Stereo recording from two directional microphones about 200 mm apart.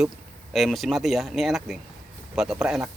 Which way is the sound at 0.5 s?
Centre (ahead or behind).